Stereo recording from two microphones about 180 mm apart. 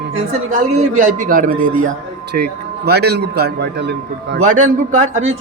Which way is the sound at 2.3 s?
65° right (ahead or behind).